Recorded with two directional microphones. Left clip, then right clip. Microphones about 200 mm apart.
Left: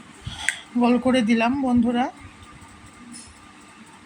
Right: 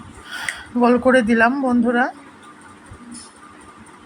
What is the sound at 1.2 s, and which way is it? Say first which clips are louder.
Speech: right 5 dB; 5° right (ahead or behind).